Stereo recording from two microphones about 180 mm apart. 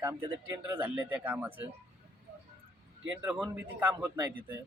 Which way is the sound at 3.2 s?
10° right (ahead or behind).